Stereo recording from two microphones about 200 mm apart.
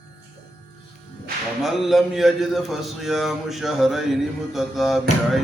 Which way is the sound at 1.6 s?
Centre (ahead or behind).